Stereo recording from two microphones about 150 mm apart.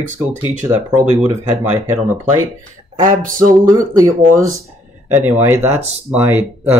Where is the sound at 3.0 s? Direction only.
65° right (ahead or behind).